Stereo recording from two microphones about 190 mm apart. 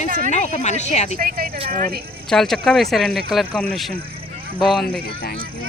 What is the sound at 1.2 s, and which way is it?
Speech, 50° right (ahead or behind).